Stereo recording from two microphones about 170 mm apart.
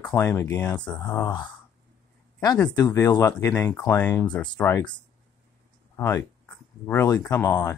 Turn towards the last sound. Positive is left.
turn(degrees=20)  # may be behind; listen again after turning